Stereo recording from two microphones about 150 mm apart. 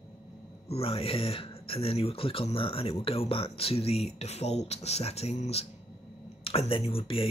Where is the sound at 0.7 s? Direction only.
40° left (ahead or behind).